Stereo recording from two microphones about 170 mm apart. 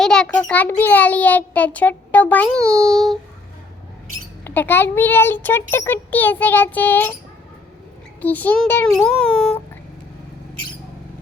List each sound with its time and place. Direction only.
0.0 s a child's voice: 5° left (ahead or behind)
2.6 s a child's voice: 20° right (ahead or behind)
2.9 s speech: centre (ahead or behind)
4.4 s a child's voice: 10° left (ahead or behind)
8.2 s a child's voice: 10° left (ahead or behind)